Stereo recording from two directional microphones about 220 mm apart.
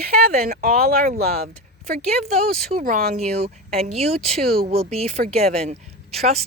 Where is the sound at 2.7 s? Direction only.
40° right (ahead or behind).